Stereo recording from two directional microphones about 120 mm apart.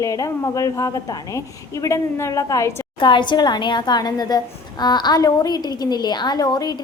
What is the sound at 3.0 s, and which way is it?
A woman's voice, 40° left (ahead or behind).